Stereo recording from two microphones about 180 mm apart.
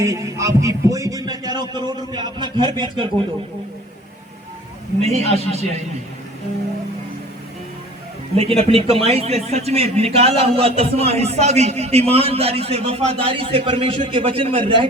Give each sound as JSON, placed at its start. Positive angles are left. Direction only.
{"t": 0.0, "sound": "heart sounds", "side_deg": -15}
{"t": 5.0, "sound": "a man's voice", "side_deg": -35}
{"t": 8.4, "sound": "a man's voice", "side_deg": -35}